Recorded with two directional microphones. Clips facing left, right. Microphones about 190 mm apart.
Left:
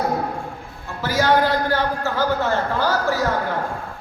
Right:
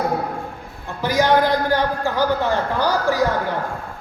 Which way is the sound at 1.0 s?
15° right (ahead or behind).